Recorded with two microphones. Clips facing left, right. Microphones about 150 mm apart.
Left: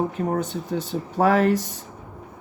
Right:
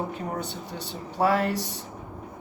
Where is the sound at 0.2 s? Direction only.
50° left (ahead or behind).